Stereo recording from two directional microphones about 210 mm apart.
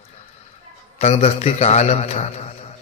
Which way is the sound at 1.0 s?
30° left (ahead or behind).